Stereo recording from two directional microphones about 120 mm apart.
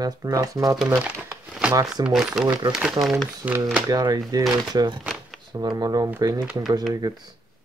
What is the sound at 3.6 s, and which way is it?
Speech, 30° right (ahead or behind).